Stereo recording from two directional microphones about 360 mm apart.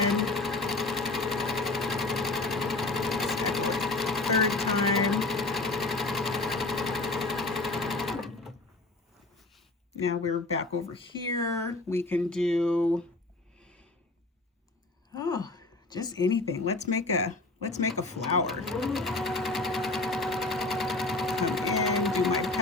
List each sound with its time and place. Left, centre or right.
0.1 s sewing machine: centre
11.3 s speech: centre
13.6 s snort: centre
15.1 s a sound: centre
17.2 s speech: left
18.4 s sewing machine: centre